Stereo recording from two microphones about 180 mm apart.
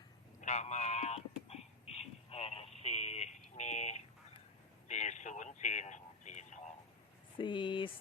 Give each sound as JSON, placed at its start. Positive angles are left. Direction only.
{"t": 0.4, "sound": "a sound", "side_deg": 40}
{"t": 4.9, "sound": "radio", "side_deg": 40}
{"t": 7.3, "sound": "speech", "side_deg": 25}